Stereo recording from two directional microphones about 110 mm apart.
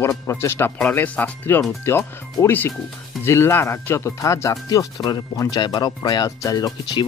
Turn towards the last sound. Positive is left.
turn(degrees=35)  # may be behind; listen again after turning